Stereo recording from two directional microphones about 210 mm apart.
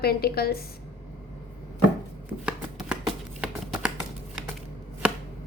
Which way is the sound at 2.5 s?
5° right (ahead or behind).